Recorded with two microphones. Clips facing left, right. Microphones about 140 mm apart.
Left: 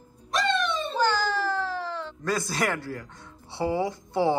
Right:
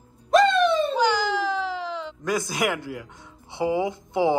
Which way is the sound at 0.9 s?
15° right (ahead or behind).